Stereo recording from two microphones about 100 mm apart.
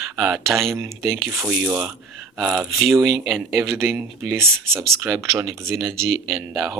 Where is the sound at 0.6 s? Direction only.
25° right (ahead or behind).